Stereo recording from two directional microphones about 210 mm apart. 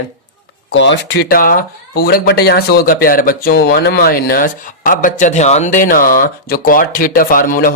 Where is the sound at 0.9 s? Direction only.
50° left (ahead or behind).